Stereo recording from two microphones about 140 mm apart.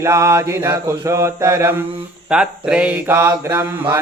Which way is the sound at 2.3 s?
5° right (ahead or behind).